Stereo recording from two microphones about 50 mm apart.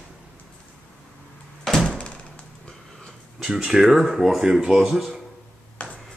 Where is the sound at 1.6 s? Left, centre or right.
Centre.